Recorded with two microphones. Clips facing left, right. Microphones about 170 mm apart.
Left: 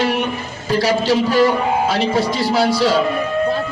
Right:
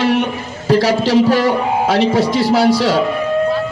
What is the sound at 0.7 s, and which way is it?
A man's voice, 75° right (ahead or behind).